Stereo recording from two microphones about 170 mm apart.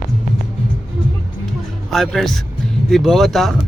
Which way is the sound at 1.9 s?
Centre (ahead or behind).